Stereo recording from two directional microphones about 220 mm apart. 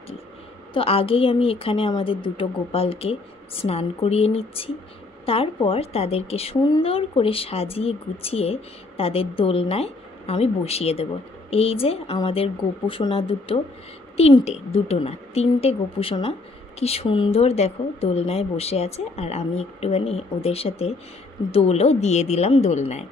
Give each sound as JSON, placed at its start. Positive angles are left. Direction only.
{"t": 0.7, "sound": "a woman's voice", "side_deg": 25}